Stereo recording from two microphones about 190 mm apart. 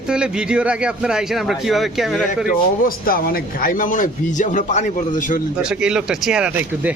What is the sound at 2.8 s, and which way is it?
A man's voice, 50° left (ahead or behind).